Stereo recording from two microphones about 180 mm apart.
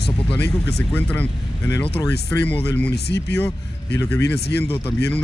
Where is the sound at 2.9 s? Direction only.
65° left (ahead or behind).